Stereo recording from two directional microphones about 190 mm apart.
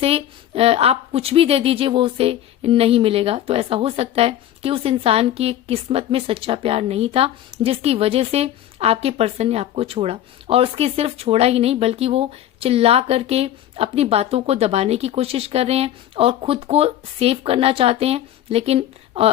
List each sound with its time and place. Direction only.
0.0 s a woman's voice: 30° right (ahead or behind)